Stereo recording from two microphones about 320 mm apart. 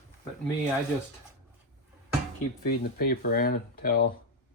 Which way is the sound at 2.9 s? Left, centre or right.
Left.